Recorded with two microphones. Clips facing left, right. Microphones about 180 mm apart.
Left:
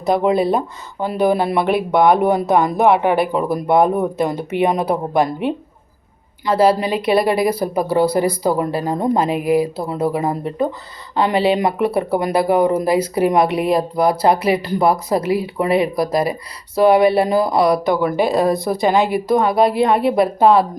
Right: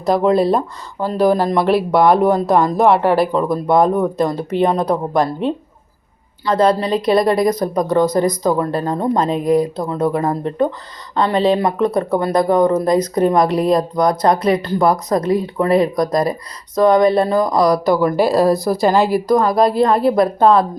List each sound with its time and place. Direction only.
0.0 s speech: 5° left (ahead or behind)